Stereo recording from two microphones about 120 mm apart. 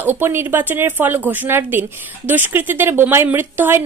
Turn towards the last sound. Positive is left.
turn(degrees=-15)  # may be behind; listen again after turning